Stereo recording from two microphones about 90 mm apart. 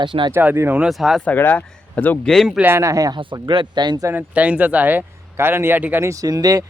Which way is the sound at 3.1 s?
60° right (ahead or behind).